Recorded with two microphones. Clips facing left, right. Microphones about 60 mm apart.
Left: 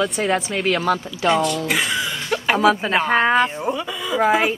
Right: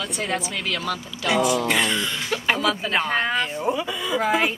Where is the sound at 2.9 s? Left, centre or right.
Centre.